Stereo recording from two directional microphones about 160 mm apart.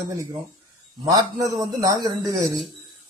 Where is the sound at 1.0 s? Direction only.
20° right (ahead or behind).